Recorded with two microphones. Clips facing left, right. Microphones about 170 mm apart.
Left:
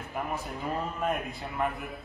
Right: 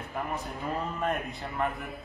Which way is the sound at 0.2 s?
5° left (ahead or behind).